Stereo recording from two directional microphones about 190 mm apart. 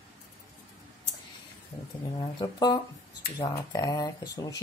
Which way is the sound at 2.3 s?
20° left (ahead or behind).